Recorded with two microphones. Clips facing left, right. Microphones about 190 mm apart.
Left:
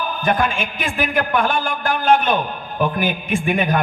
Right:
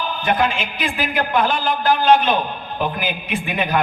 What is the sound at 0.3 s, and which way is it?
Speech, 50° left (ahead or behind).